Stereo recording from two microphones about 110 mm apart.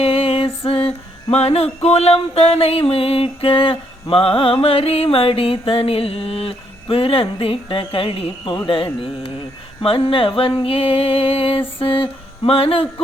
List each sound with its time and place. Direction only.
0.0 s music: 60° left (ahead or behind)